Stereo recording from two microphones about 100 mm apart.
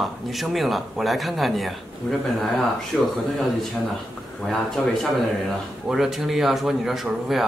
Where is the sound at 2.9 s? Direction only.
5° left (ahead or behind).